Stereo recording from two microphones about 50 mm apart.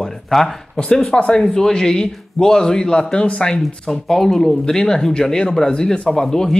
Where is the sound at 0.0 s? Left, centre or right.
Centre.